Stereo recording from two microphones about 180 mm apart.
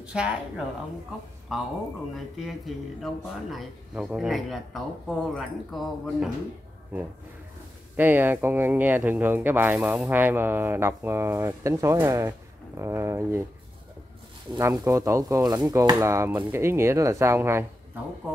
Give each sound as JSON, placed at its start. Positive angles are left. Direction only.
{"t": 0.0, "sound": "speech", "side_deg": -5}
{"t": 2.1, "sound": "speech", "side_deg": 0}
{"t": 14.6, "sound": "speech", "side_deg": -20}